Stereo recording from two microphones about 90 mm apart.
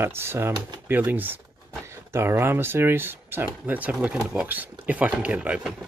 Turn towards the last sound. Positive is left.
turn(degrees=-15)  # may be behind; listen again after turning